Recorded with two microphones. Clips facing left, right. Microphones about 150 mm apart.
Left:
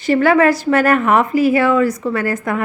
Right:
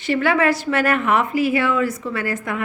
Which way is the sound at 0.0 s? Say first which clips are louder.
Left 6 dB; 40° left (ahead or behind).